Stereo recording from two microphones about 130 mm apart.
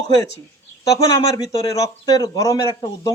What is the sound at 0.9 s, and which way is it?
Speech, 25° left (ahead or behind).